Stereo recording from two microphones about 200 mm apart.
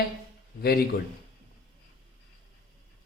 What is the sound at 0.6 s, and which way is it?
Speech, 50° left (ahead or behind).